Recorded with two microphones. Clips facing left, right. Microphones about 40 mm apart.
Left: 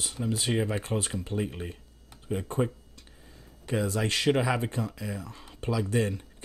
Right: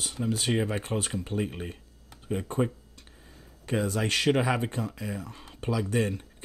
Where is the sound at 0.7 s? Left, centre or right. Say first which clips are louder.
Even; right.